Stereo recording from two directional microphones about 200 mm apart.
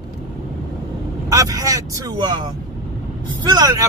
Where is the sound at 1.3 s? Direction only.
15° right (ahead or behind).